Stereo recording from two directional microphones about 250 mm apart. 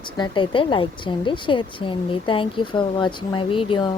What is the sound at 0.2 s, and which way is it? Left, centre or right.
A woman's voice, centre.